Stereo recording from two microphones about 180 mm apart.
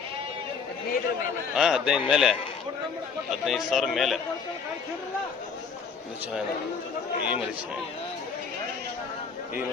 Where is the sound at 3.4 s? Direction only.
Centre (ahead or behind).